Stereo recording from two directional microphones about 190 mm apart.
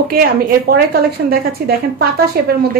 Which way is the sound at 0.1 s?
50° right (ahead or behind).